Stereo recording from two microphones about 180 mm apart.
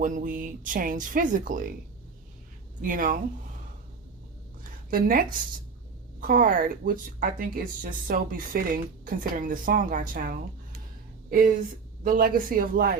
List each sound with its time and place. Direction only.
0.0 s a woman's voice: 50° right (ahead or behind)
2.8 s a woman's voice: 50° right (ahead or behind)
4.9 s a woman's voice: 50° right (ahead or behind)